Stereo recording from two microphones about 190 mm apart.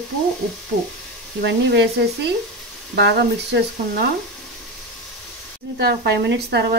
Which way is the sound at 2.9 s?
60° right (ahead or behind).